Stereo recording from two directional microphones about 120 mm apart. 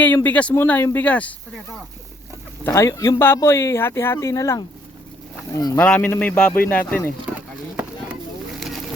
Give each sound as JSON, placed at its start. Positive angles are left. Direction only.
{"t": 0.0, "sound": "speech", "side_deg": 15}
{"t": 2.6, "sound": "speech", "side_deg": 25}
{"t": 5.8, "sound": "speech", "side_deg": 10}